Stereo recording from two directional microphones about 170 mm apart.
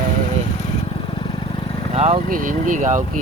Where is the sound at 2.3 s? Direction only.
50° right (ahead or behind).